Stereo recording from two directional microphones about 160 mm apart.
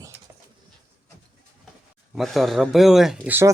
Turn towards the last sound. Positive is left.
turn(degrees=-15)  # may be behind; listen again after turning